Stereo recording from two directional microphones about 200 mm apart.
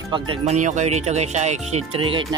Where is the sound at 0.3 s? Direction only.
35° right (ahead or behind).